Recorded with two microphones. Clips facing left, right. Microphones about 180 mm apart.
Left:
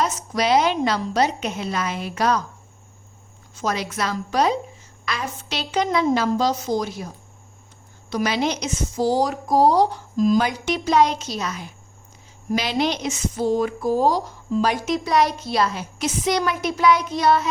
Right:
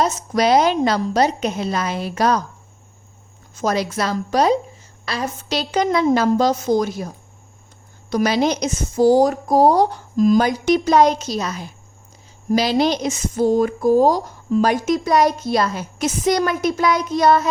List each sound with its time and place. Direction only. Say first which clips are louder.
0.0 s a woman's voice: right 4 dB; 45° right (ahead or behind)
3.5 s a woman's voice: right 5 dB; 40° right (ahead or behind)
8.1 s a woman's voice: right 5 dB; 40° right (ahead or behind)